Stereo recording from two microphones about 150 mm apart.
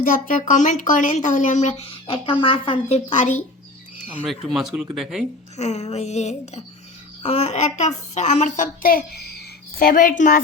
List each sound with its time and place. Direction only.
0.0 s speech: 65° left (ahead or behind); by 3.0 s 35° left (ahead or behind)
3.1 s speech: 55° left (ahead or behind)
4.0 s speech: 10° right (ahead or behind)
5.5 s a woman's voice: 50° left (ahead or behind)